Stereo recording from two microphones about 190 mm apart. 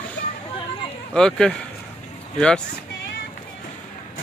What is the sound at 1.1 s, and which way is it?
Speech, 5° left (ahead or behind).